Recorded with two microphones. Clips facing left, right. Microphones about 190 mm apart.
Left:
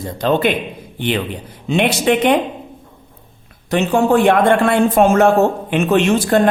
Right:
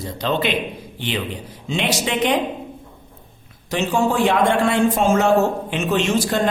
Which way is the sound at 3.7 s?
60° left (ahead or behind).